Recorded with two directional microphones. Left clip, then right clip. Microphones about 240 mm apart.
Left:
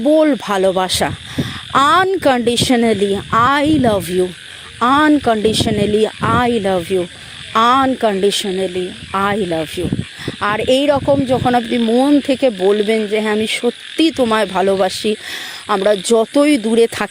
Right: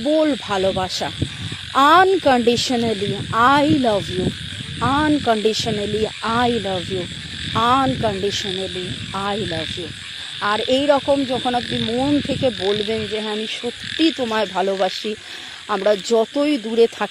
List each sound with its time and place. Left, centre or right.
0.0 s speech: left